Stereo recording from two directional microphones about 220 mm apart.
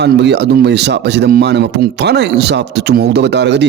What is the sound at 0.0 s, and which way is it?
Speech, 50° right (ahead or behind).